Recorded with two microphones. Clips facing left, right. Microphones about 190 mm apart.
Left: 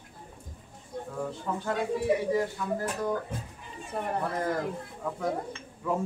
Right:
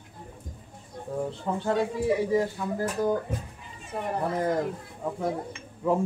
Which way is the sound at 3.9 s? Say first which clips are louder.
Right 1 dB; centre (ahead or behind).